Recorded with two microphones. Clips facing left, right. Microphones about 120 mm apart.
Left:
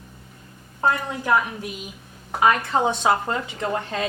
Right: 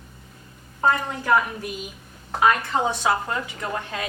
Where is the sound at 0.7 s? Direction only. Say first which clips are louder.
Right 1 dB; 10° left (ahead or behind).